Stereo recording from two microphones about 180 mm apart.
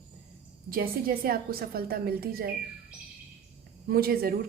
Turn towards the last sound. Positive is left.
turn(degrees=-55)  # may be behind; listen again after turning